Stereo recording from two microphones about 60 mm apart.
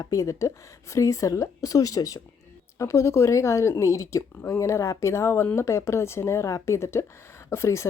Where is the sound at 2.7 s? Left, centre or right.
Left.